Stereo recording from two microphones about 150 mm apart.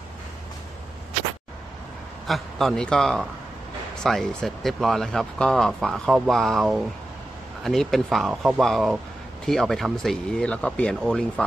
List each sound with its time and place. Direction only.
2.2 s speech: centre (ahead or behind)